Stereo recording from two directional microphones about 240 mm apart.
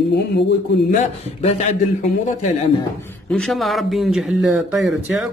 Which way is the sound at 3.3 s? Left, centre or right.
Centre.